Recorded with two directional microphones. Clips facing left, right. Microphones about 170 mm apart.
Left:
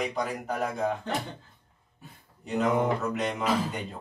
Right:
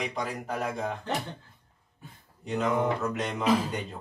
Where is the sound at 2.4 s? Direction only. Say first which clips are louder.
Left 1 dB; centre (ahead or behind).